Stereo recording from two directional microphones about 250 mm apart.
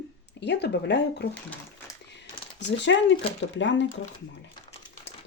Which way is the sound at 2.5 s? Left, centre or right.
Left.